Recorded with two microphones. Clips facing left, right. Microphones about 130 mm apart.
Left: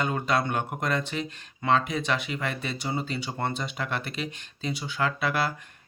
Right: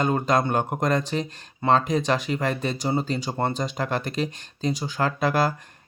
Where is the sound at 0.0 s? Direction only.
40° right (ahead or behind).